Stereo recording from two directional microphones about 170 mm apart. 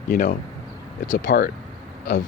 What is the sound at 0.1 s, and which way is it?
Speech, 55° left (ahead or behind).